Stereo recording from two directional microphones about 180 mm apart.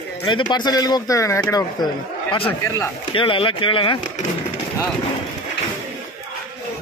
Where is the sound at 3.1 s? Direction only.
30° left (ahead or behind).